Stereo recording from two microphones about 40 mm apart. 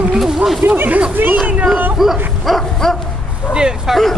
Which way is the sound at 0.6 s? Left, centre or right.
Right.